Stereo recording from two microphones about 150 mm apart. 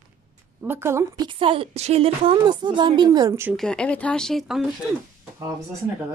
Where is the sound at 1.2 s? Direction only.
35° right (ahead or behind).